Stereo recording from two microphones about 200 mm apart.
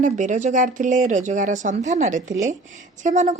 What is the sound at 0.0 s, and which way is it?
Speech, 40° right (ahead or behind).